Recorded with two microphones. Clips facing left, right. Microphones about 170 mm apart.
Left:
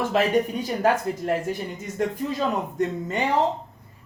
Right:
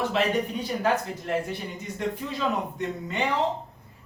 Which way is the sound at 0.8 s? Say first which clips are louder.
Left 5 dB; 40° left (ahead or behind).